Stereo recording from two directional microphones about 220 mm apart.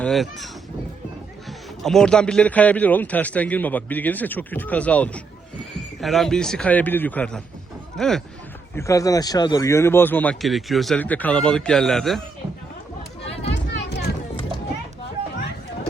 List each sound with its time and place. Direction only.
0.0 s a man's voice: centre (ahead or behind)
8.7 s a man's voice: 15° left (ahead or behind)
13.5 s a sound: 50° left (ahead or behind)